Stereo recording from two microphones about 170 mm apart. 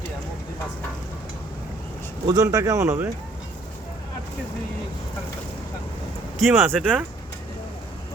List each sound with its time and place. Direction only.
2.2 s speech: 20° right (ahead or behind)
6.5 s speech: 15° right (ahead or behind)